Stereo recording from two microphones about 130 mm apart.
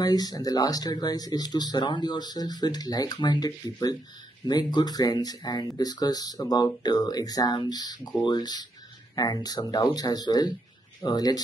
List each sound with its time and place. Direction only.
0.0 s speech: 30° left (ahead or behind)